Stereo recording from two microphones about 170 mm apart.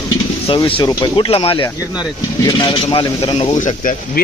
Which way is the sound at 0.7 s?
25° left (ahead or behind).